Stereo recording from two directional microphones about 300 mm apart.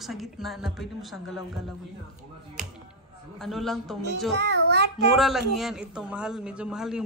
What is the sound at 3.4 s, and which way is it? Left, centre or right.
Speech, centre.